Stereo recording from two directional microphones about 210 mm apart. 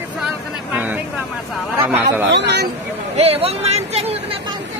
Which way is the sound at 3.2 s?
30° right (ahead or behind).